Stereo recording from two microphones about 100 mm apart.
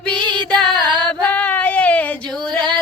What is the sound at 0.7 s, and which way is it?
Singing, 50° right (ahead or behind).